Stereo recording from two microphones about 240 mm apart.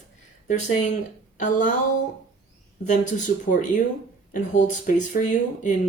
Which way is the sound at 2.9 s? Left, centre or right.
Left.